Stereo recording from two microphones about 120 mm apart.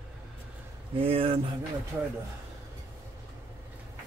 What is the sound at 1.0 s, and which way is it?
Speech, 55° right (ahead or behind).